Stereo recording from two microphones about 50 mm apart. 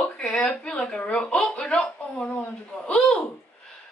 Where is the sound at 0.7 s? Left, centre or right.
Centre.